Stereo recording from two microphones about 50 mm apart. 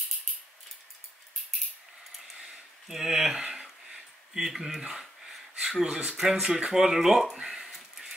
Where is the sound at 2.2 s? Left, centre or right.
Centre.